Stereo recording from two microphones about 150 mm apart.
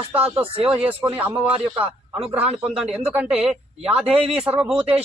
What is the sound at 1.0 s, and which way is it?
A man's voice, 10° right (ahead or behind).